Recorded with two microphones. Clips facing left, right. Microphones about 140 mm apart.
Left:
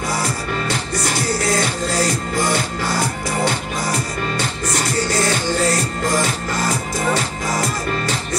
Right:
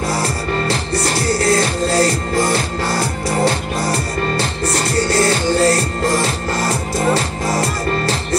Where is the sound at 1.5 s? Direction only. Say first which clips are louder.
Right 4 dB; 30° right (ahead or behind).